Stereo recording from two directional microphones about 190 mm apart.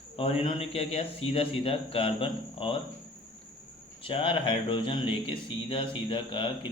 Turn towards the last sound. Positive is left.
turn(degrees=25)  # may be behind; listen again after turning